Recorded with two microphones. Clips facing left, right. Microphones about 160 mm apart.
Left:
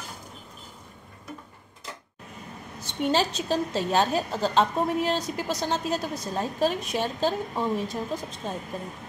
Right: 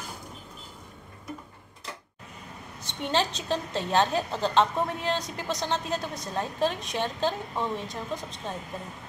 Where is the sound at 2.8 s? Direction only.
5° left (ahead or behind).